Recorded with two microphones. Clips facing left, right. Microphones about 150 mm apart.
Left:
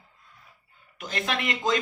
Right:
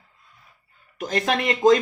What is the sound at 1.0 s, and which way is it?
Speech, 40° right (ahead or behind).